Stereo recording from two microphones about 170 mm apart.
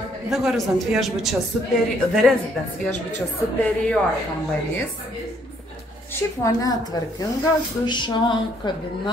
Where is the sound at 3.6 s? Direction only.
10° left (ahead or behind).